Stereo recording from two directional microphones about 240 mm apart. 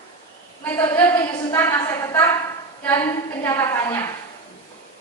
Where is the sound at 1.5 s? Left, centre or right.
Centre.